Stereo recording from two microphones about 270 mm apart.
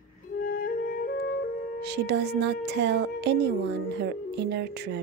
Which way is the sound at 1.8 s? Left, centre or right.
Right.